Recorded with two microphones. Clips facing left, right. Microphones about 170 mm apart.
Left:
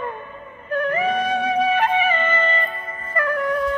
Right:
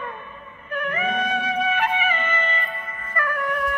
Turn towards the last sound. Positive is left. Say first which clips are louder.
# left 4 dB
turn(degrees=30)  # may be behind; listen again after turning